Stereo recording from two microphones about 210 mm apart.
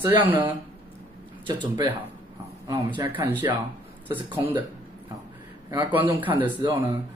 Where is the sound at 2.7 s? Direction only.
15° right (ahead or behind).